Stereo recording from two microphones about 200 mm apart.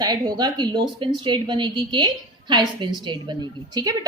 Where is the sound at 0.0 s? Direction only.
20° right (ahead or behind).